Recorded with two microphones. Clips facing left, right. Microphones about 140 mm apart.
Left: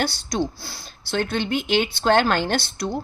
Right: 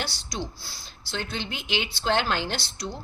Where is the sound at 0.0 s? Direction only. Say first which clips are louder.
Left 9 dB; 50° left (ahead or behind).